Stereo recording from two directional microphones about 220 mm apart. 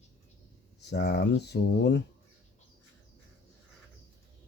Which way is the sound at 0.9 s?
50° left (ahead or behind).